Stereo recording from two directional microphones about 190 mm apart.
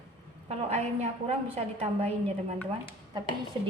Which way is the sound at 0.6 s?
35° right (ahead or behind).